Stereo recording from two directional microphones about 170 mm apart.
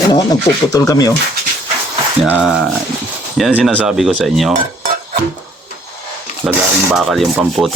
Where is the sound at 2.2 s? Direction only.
5° right (ahead or behind).